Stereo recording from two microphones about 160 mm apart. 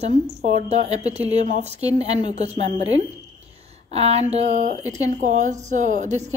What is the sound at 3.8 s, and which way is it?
A woman's voice, 40° right (ahead or behind).